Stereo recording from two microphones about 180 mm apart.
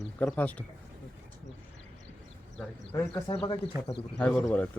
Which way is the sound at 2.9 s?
10° left (ahead or behind).